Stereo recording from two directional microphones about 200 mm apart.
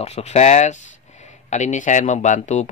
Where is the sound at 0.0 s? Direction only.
30° left (ahead or behind).